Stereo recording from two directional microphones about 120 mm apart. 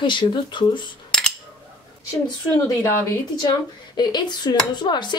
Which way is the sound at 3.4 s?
35° left (ahead or behind).